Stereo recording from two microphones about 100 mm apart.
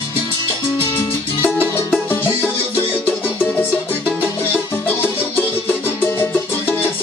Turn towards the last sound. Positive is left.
turn(degrees=20)  # may be behind; listen again after turning